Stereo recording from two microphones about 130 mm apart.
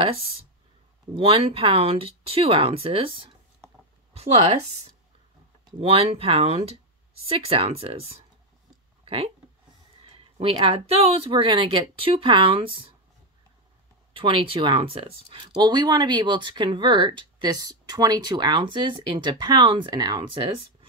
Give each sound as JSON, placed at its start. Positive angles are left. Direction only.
{"t": 1.1, "sound": "speech", "side_deg": -50}
{"t": 5.7, "sound": "speech", "side_deg": -50}
{"t": 9.0, "sound": "a sound", "side_deg": -50}
{"t": 10.4, "sound": "speech", "side_deg": -45}
{"t": 14.1, "sound": "speech", "side_deg": -40}